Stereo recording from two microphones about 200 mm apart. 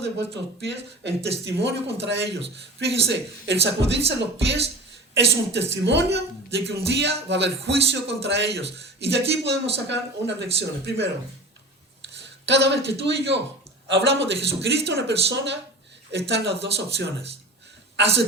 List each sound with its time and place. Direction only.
0.0 s speech: 60° right (ahead or behind)